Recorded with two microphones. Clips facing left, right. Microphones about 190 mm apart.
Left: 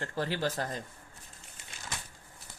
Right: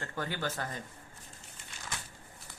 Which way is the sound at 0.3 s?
35° left (ahead or behind).